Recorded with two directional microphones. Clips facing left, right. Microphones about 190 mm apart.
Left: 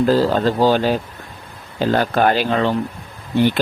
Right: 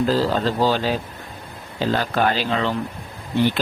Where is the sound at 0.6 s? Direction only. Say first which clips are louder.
Left 4 dB; 50° left (ahead or behind).